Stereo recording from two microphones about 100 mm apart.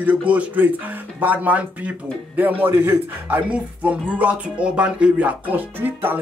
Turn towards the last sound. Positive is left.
turn(degrees=-20)  # may be behind; listen again after turning